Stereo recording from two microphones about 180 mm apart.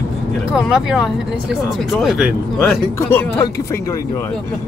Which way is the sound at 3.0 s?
15° left (ahead or behind).